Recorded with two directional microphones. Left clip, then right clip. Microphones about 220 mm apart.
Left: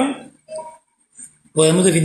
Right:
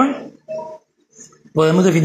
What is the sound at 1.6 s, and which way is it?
Speech, 10° right (ahead or behind).